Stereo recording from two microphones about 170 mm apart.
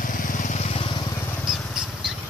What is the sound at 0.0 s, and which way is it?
Vehicle, 50° left (ahead or behind).